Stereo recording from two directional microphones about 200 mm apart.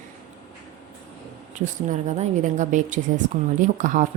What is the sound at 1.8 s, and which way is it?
A woman's voice, 40° right (ahead or behind).